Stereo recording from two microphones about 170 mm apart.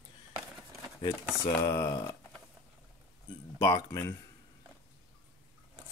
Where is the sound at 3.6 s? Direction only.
20° left (ahead or behind).